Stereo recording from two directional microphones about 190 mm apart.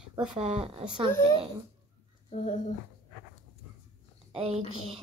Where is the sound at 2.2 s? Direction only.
40° left (ahead or behind).